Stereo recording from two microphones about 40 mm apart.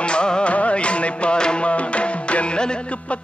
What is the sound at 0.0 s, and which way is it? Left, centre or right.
Music, left.